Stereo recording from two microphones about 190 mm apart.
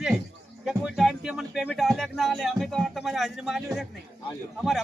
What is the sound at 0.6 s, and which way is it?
Speech, centre (ahead or behind).